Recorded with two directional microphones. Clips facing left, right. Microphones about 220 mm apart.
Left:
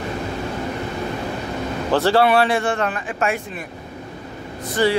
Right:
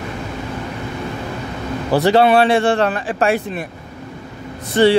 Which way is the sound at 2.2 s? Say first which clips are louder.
Right 4 dB; 25° right (ahead or behind).